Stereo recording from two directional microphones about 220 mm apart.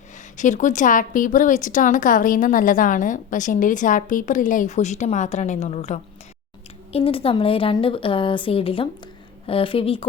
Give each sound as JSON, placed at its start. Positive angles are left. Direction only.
{"t": 0.3, "sound": "a woman's voice", "side_deg": 35}